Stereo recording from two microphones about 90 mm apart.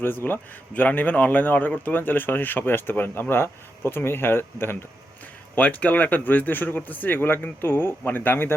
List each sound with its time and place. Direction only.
0.0 s a man's voice: 25° left (ahead or behind)